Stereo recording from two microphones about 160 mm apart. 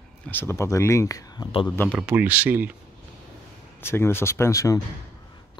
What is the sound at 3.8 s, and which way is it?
Speech, 15° left (ahead or behind).